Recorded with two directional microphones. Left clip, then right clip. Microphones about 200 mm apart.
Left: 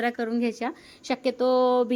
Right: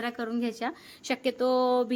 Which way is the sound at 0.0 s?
15° left (ahead or behind).